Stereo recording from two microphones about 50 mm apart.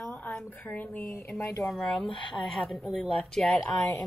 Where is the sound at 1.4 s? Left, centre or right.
Left.